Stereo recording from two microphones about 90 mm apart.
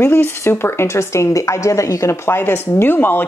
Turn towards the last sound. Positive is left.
turn(degrees=25)  # may be behind; listen again after turning